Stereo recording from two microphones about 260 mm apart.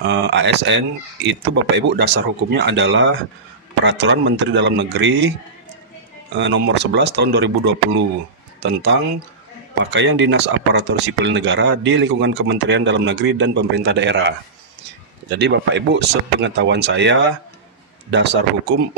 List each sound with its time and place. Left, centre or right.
0.0 s speech: right
6.3 s speech: right